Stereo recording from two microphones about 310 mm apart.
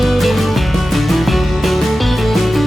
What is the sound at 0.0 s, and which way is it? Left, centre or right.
Music, centre.